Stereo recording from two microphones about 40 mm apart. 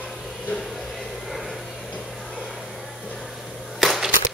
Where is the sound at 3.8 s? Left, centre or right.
Centre.